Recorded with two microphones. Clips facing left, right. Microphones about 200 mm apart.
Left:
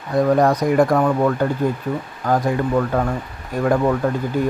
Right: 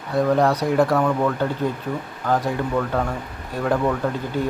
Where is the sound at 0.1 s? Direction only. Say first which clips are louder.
Left 3 dB; 15° left (ahead or behind).